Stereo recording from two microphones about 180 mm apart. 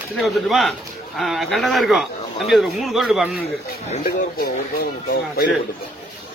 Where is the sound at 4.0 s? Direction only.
55° left (ahead or behind).